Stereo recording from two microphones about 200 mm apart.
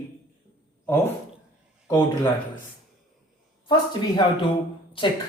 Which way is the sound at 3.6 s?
20° left (ahead or behind).